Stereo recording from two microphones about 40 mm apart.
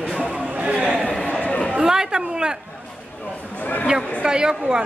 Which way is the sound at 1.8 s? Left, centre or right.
Centre.